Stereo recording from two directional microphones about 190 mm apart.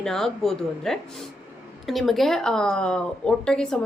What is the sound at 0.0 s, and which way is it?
A woman's voice, centre (ahead or behind).